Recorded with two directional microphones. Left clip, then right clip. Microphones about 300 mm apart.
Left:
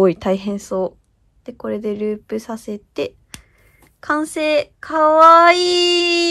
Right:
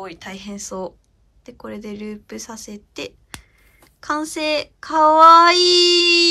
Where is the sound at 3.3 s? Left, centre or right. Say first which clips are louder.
Right 1 dB; centre.